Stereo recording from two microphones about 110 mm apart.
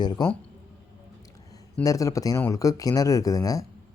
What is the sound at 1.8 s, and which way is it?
Speech, 30° left (ahead or behind).